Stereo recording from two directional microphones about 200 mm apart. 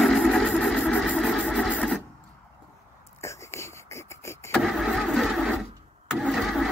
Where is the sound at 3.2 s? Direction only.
15° left (ahead or behind).